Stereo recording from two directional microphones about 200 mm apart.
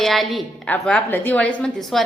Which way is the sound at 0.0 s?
Centre (ahead or behind).